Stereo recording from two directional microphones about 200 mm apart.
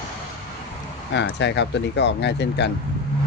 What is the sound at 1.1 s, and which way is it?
Speech, 60° left (ahead or behind).